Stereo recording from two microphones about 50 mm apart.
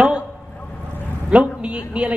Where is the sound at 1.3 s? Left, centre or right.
Right.